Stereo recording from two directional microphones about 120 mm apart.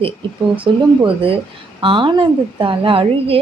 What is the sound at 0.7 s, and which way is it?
A woman's voice, 45° right (ahead or behind).